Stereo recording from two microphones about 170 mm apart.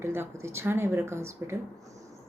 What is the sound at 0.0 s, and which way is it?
Speech, 15° right (ahead or behind).